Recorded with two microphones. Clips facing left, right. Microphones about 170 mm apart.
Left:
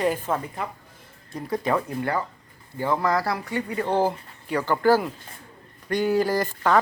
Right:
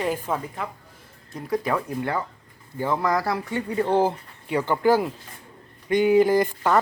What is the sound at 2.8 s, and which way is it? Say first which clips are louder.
A woman's voice: even; 20° right (ahead or behind).